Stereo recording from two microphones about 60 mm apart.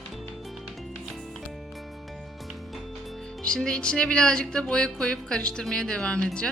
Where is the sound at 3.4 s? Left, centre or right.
Centre.